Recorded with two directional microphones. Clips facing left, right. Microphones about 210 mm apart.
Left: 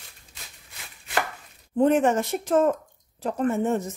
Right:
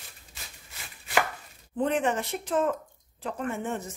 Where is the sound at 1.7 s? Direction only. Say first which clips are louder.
Left 7 dB; 45° left (ahead or behind).